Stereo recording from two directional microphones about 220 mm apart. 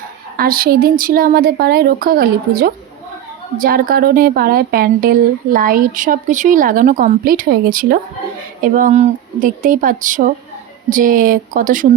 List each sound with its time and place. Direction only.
0.3 s a woman's voice: 40° right (ahead or behind)